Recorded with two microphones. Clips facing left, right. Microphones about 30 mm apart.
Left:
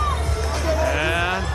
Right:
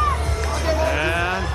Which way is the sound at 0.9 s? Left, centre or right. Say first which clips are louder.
Even; centre.